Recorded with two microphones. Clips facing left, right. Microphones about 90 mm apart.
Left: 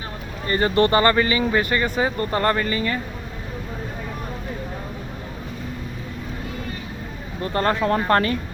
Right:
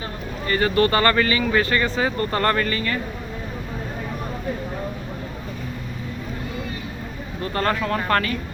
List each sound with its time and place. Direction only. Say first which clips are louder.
0.4 s speech: left 1 dB; 30° left (ahead or behind)
7.4 s speech: left 2 dB; 25° left (ahead or behind)